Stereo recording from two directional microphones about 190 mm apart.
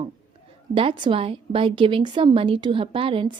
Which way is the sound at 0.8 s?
25° right (ahead or behind).